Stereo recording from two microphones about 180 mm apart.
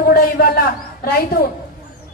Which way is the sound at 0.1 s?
60° left (ahead or behind).